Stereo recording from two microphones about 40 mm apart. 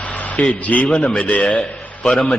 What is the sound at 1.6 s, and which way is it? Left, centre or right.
Speech, left.